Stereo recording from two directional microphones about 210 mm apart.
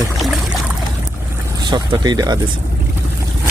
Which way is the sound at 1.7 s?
20° right (ahead or behind).